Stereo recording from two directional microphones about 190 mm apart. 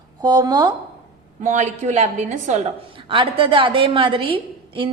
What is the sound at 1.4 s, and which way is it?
A woman's voice, 40° right (ahead or behind).